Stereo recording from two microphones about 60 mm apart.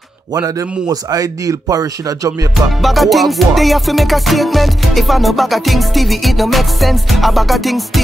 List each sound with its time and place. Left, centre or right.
0.3 s a man's voice: right
2.5 s music: centre